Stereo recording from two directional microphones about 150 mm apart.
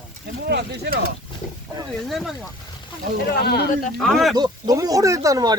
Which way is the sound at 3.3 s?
90° left.